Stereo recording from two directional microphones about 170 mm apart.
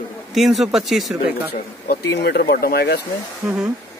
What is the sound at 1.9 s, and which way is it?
Speech, 70° left (ahead or behind).